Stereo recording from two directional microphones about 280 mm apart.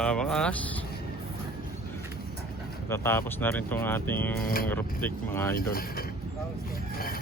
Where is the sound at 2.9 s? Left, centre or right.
Centre.